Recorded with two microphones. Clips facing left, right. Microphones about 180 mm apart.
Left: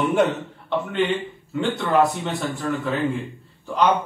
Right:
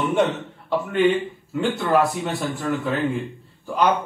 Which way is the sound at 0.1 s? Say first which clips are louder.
Left 1 dB; centre (ahead or behind).